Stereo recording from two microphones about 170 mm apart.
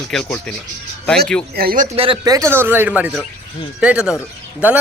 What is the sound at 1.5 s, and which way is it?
Speech, 55° right (ahead or behind).